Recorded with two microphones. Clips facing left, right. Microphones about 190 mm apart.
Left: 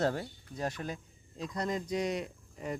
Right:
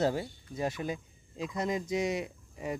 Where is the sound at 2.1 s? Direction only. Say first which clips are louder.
Right 2 dB; 5° right (ahead or behind).